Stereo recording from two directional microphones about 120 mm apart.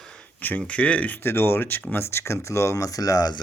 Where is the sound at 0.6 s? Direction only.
10° left (ahead or behind).